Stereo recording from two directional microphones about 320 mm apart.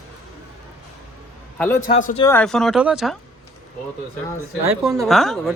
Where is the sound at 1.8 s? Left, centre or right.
Left.